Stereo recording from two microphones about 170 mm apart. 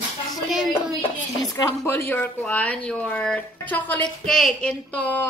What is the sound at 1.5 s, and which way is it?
Speech, 15° left (ahead or behind).